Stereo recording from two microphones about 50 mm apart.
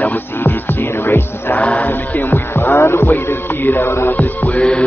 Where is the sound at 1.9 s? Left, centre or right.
Left.